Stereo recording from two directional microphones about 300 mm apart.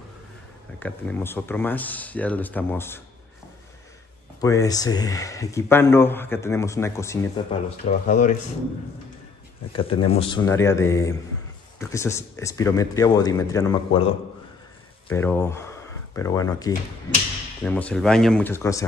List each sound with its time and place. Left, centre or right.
0.7 s speech: centre
4.4 s speech: centre
7.8 s speech: left
9.7 s speech: centre
15.0 s speech: centre